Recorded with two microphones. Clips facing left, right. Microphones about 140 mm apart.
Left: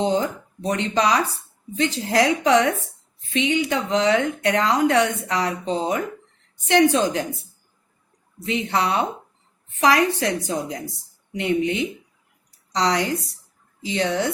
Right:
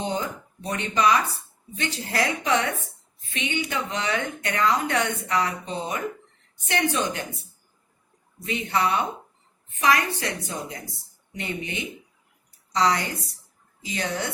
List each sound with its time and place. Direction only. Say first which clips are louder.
0.0 s a woman's voice: left 7 dB; 90° left
8.4 s a woman's voice: left 2 dB; 90° left